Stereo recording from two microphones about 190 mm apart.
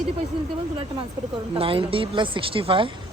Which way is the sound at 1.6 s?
30° right (ahead or behind).